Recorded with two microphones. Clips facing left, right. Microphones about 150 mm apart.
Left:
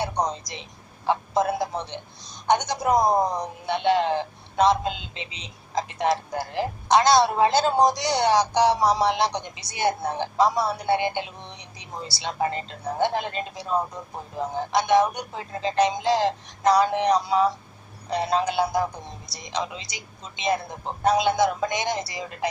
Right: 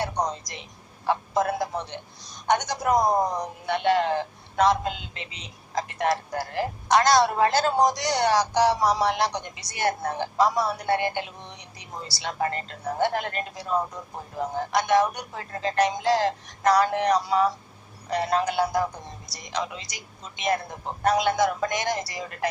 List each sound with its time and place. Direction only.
0.0 s a woman's voice: 15° left (ahead or behind)